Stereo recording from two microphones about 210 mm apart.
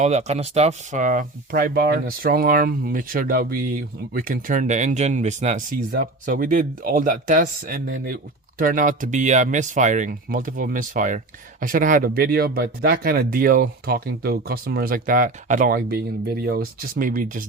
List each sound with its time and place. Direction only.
0.0 s speech: 30° right (ahead or behind)